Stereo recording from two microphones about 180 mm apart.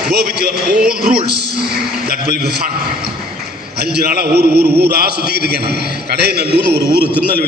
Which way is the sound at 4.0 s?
60° right (ahead or behind).